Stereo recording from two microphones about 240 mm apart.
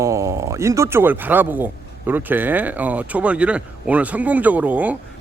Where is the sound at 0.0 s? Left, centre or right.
Centre.